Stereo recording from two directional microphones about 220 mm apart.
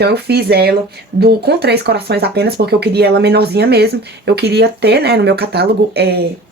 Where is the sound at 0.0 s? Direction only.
45° right (ahead or behind).